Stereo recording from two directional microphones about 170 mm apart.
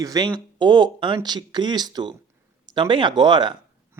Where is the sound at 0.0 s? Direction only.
25° right (ahead or behind).